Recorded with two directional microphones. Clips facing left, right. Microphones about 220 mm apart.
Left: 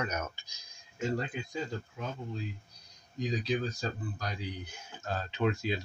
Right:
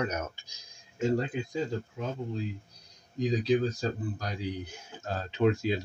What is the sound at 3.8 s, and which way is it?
Speech, 35° right (ahead or behind).